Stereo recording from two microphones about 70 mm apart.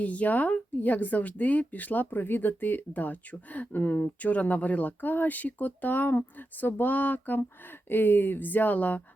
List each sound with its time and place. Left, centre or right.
0.0 s speech: left